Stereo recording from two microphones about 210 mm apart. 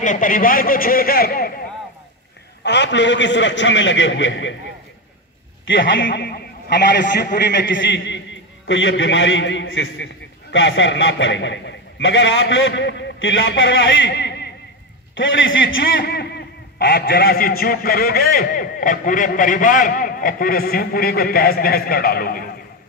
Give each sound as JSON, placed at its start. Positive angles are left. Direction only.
{"t": 0.0, "sound": "a man's voice", "side_deg": 40}
{"t": 2.6, "sound": "a man's voice", "side_deg": 55}
{"t": 5.7, "sound": "a man's voice", "side_deg": 60}
{"t": 15.1, "sound": "a man's voice", "side_deg": 65}